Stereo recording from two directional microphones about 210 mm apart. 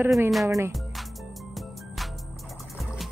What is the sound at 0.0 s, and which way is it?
Speech, 5° right (ahead or behind).